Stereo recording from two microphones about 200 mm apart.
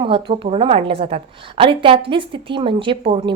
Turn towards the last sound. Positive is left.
turn(degrees=-25)  # may be behind; listen again after turning